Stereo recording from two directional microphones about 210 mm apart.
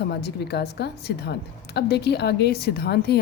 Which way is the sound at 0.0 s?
50° left (ahead or behind).